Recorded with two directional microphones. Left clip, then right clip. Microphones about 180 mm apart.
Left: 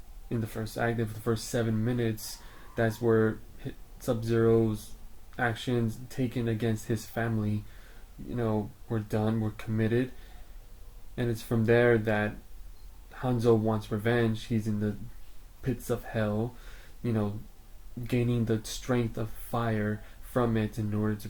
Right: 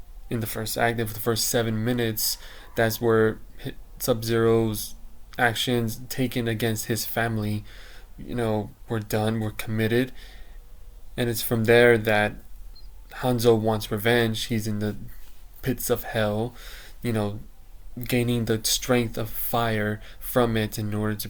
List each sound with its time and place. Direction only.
0.3 s speech: 15° right (ahead or behind)
11.1 s speech: 15° right (ahead or behind)